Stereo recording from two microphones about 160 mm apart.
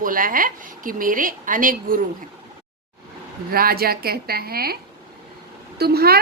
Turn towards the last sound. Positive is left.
turn(degrees=-75)  # may be behind; listen again after turning